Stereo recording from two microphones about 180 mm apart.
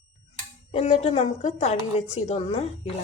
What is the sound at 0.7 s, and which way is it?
A woman's voice, 35° left (ahead or behind).